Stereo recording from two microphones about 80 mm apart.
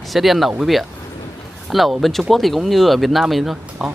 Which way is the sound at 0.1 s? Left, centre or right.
Centre.